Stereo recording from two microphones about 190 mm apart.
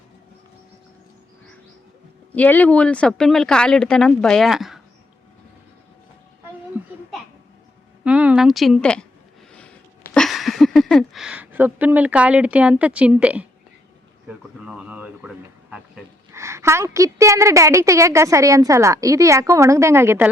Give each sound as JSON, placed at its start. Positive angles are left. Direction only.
{"t": 2.3, "sound": "speech", "side_deg": 10}
{"t": 8.0, "sound": "a sound", "side_deg": -5}
{"t": 14.3, "sound": "a woman's voice", "side_deg": -5}